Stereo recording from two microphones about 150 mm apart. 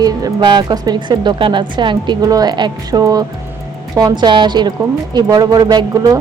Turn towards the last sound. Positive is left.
turn(degrees=-25)  # may be behind; listen again after turning